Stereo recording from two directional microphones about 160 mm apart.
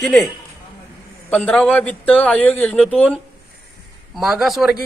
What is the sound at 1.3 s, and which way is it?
A man's voice, 5° left (ahead or behind).